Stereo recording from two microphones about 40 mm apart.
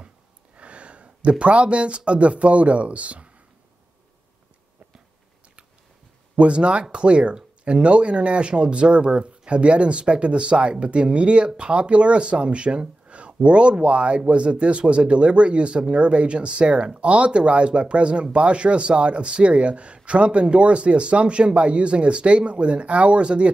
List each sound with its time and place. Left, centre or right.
0.6 s a sound: right
1.4 s speech: right
6.3 s speech: right